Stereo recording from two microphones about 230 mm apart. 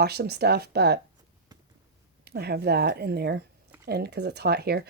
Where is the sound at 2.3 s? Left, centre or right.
Right.